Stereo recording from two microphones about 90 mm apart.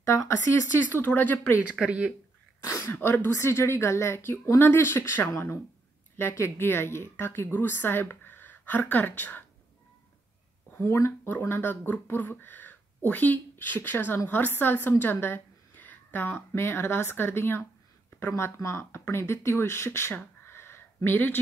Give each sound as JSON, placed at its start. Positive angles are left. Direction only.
{"t": 0.0, "sound": "speech", "side_deg": 35}
{"t": 0.8, "sound": "a woman's voice", "side_deg": 20}
{"t": 1.7, "sound": "speech", "side_deg": -10}
{"t": 2.6, "sound": "a woman's voice", "side_deg": 30}
{"t": 10.7, "sound": "a woman's voice", "side_deg": 30}
{"t": 20.4, "sound": "a sound", "side_deg": 25}